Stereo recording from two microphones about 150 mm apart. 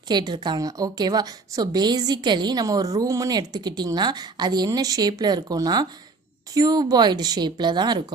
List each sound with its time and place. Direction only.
0.1 s a woman's voice: 30° right (ahead or behind)